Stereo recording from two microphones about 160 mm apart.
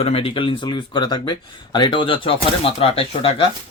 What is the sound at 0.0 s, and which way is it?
Speech, 35° left (ahead or behind).